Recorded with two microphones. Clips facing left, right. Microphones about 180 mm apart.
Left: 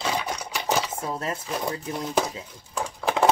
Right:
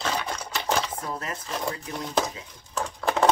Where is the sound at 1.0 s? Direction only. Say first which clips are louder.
Left 4 dB; 25° left (ahead or behind).